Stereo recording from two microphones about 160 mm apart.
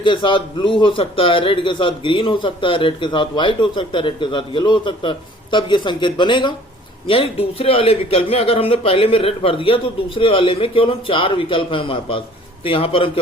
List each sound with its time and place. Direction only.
0.0 s a man's voice: 30° left (ahead or behind)